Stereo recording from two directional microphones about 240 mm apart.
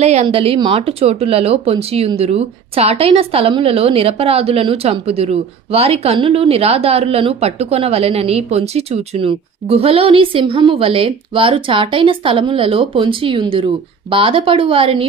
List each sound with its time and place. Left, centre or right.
0.0 s speech: right